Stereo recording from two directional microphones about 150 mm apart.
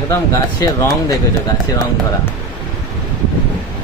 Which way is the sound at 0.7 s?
25° left (ahead or behind).